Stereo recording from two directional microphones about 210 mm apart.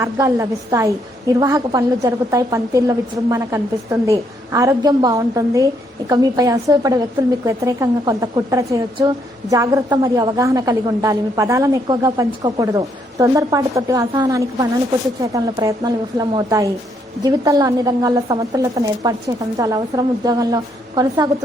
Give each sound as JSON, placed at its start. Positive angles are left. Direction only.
{"t": 0.0, "sound": "a woman's voice", "side_deg": -15}